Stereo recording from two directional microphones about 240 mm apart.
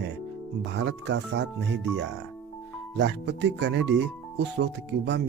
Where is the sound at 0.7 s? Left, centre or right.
Right.